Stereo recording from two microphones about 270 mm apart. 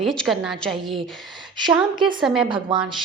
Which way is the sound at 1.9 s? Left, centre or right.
Centre.